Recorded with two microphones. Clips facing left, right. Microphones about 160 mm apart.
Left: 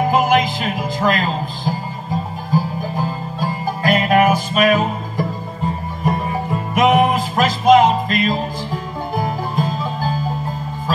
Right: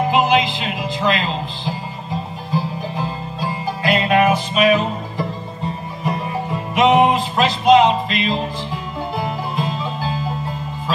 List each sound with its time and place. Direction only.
0.1 s music: 45° left (ahead or behind)